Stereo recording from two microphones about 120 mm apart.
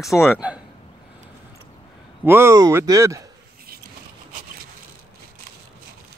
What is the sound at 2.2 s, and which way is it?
Speech, 20° right (ahead or behind).